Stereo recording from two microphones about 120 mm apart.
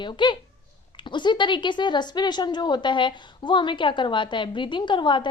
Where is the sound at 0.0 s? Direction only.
40° left (ahead or behind).